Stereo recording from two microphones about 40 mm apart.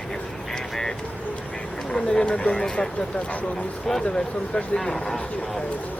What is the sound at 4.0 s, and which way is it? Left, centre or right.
Speech, left.